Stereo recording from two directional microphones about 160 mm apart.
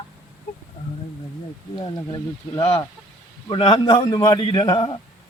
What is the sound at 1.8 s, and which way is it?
A man's voice, 25° left (ahead or behind).